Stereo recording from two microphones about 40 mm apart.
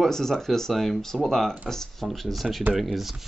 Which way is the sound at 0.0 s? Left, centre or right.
Centre.